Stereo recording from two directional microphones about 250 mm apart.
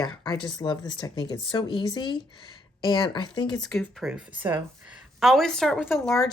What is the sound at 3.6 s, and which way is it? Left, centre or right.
Speech, centre.